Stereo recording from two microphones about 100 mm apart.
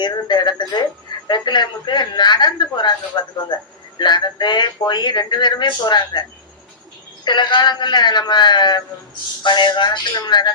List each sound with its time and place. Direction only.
0.0 s speech: 45° left (ahead or behind)
7.3 s speech: 50° left (ahead or behind)